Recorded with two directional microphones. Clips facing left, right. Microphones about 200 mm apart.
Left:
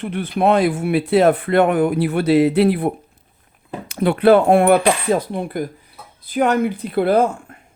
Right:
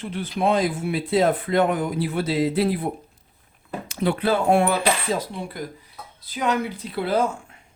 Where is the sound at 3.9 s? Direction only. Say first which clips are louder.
Left 9 dB; 60° left (ahead or behind).